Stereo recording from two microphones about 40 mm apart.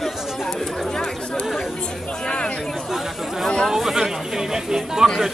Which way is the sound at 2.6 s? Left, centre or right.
Centre.